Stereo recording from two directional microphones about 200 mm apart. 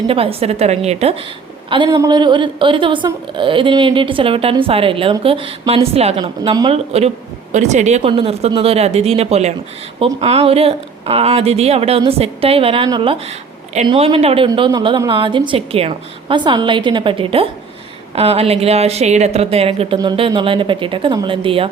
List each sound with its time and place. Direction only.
0.1 s a woman's voice: 30° right (ahead or behind)